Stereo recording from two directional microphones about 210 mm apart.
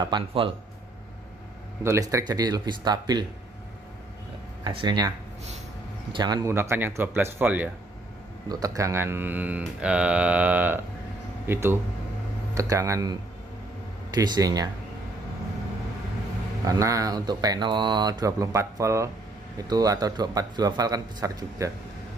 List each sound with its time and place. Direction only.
0.0 s speech: 25° right (ahead or behind)
1.8 s speech: 15° right (ahead or behind)
4.6 s speech: 20° right (ahead or behind)
6.1 s speech: 20° right (ahead or behind)
16.6 s speech: 15° right (ahead or behind)